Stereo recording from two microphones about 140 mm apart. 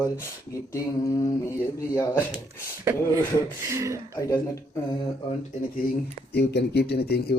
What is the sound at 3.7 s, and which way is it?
Speech, 20° right (ahead or behind).